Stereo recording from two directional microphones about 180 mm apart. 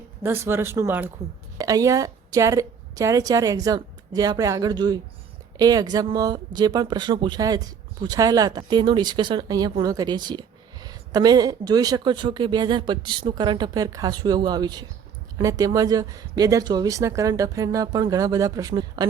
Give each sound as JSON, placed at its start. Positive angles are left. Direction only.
{"t": 0.2, "sound": "speech", "side_deg": -15}